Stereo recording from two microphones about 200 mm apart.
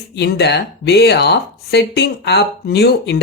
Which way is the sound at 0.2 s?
55° left (ahead or behind).